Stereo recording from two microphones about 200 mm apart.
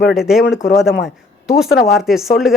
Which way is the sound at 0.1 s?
Centre (ahead or behind).